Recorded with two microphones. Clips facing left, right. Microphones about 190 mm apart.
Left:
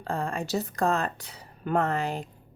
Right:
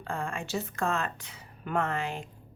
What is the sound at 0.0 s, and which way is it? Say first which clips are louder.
Speech: left 4 dB; 35° left (ahead or behind).